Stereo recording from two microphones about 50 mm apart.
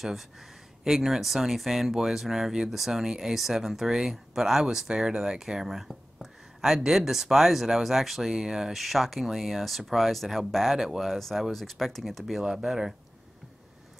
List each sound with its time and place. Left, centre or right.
0.8 s speech: centre